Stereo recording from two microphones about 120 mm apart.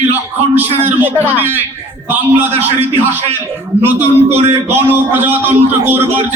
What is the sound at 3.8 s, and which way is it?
A man's voice, 15° right (ahead or behind).